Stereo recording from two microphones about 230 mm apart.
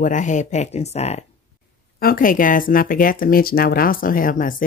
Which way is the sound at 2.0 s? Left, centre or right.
Left.